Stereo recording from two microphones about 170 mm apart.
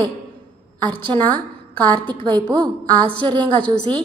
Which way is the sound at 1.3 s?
25° right (ahead or behind).